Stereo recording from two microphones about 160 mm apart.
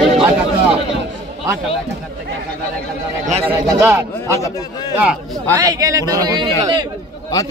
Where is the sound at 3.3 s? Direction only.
40° right (ahead or behind).